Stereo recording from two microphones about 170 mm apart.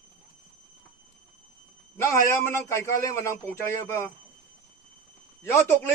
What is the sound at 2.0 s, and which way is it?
A man's voice, 15° left (ahead or behind).